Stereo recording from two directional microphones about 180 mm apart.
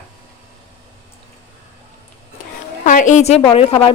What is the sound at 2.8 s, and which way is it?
A woman's voice, 45° left (ahead or behind).